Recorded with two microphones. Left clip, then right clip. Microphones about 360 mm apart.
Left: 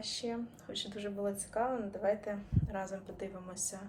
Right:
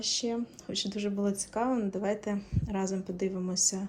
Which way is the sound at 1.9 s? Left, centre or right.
Right.